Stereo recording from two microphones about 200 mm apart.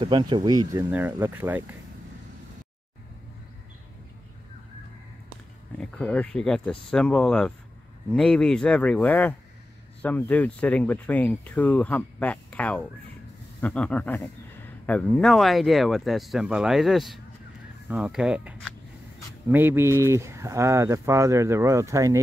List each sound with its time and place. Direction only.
0.0 s speech: 25° right (ahead or behind)
0.8 s speech: 10° right (ahead or behind)
5.8 s speech: 5° left (ahead or behind); by 22.2 s 15° right (ahead or behind)